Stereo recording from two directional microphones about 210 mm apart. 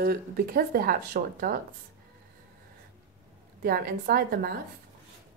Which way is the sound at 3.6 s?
45° right (ahead or behind).